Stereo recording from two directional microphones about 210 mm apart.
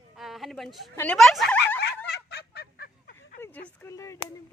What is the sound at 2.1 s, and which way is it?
Fowl, 50° left (ahead or behind).